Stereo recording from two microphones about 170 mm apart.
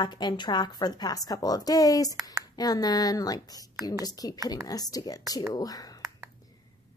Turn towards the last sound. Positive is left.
turn(degrees=20)  # may be behind; listen again after turning